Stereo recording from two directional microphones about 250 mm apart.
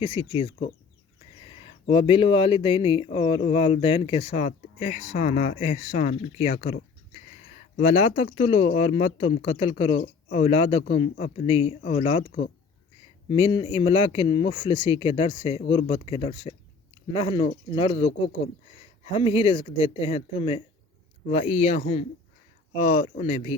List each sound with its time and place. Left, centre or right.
0.0 s speech: left
19.1 s speech: left